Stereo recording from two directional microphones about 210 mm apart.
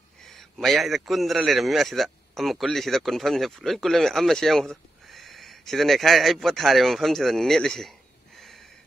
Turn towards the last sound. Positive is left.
turn(degrees=0)  # may be behind; listen again after turning